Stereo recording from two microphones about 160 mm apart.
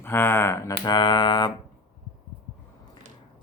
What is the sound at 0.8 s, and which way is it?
Speech, 25° left (ahead or behind).